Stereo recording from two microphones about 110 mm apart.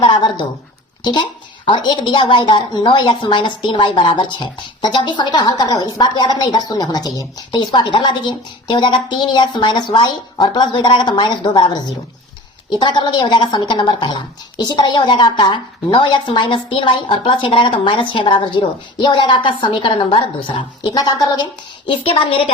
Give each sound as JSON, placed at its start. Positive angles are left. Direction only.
{"t": 0.0, "sound": "a woman's voice", "side_deg": 45}
{"t": 12.8, "sound": "a woman's voice", "side_deg": 45}
{"t": 20.9, "sound": "a woman's voice", "side_deg": 35}
{"t": 21.8, "sound": "a woman's voice", "side_deg": 55}